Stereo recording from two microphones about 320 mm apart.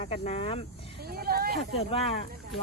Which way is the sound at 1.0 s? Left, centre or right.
Right.